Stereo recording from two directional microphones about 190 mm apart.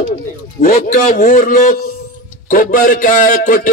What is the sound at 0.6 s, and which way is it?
A man's voice, 45° left (ahead or behind).